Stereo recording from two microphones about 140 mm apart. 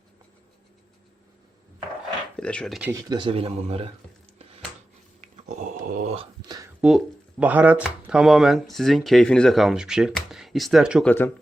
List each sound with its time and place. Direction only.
2.3 s speech: 10° left (ahead or behind)
2.9 s speech: 30° right (ahead or behind); by 3.8 s 45° right (ahead or behind)
5.2 s dog: 60° right (ahead or behind)
6.8 s speech: 5° right (ahead or behind)
10.2 s a sound: centre (ahead or behind)
11.0 s speech: 15° left (ahead or behind)